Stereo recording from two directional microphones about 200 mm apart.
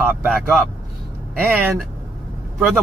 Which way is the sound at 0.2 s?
5° right (ahead or behind).